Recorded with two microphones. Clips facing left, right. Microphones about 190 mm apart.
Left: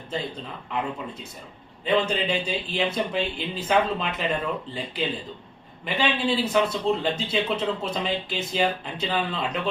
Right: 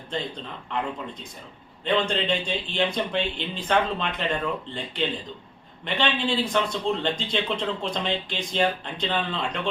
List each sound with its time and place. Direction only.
1.8 s speech: 5° left (ahead or behind)